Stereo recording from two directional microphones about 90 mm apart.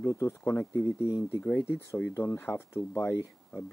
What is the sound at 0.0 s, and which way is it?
Speech, 35° left (ahead or behind).